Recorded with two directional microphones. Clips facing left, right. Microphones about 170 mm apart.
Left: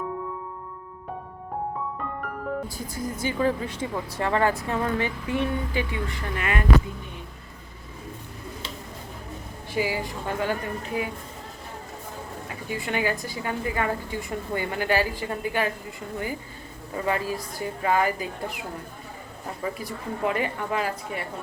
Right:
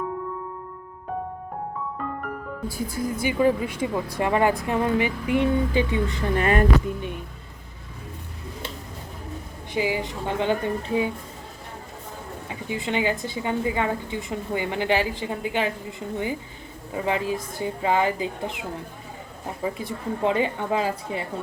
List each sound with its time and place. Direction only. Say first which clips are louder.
2.6 s speech: right 5 dB; 10° right (ahead or behind)
6.3 s speech: right 8 dB; 35° right (ahead or behind)
9.7 s a woman's voice: right 2 dB; 20° right (ahead or behind)
12.5 s a woman's voice: right 3 dB; 20° right (ahead or behind)
19.6 s a woman's voice: right 3 dB; 25° right (ahead or behind)